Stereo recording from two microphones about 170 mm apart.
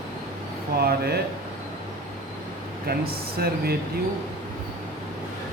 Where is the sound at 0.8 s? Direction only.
65° right (ahead or behind).